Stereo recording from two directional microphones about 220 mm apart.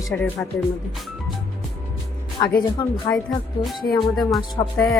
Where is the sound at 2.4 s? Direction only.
15° left (ahead or behind).